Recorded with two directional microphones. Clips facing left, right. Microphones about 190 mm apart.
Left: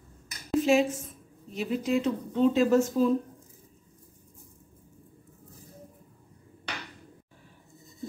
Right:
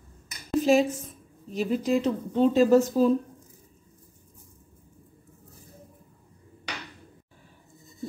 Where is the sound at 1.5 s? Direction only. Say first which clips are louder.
Right 3 dB; 35° right (ahead or behind).